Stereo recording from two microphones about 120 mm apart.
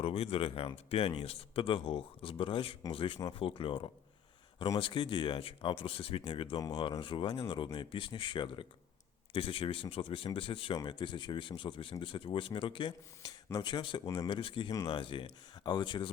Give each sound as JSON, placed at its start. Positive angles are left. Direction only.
{"t": 0.0, "sound": "speech", "side_deg": 55}
{"t": 6.6, "sound": "speech", "side_deg": 30}
{"t": 7.0, "sound": "speech", "side_deg": 45}
{"t": 14.7, "sound": "speech", "side_deg": 30}
{"t": 14.9, "sound": "speech", "side_deg": 45}